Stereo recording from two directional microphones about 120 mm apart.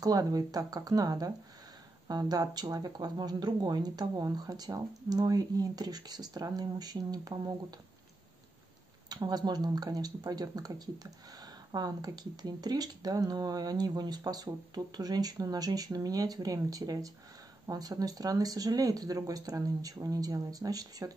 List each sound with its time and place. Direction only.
0.0 s speech: 30° right (ahead or behind)
9.1 s speech: 35° right (ahead or behind)